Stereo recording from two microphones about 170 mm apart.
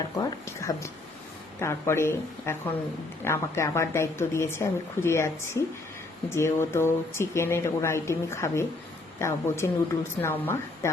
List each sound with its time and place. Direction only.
0.2 s speech: 20° left (ahead or behind)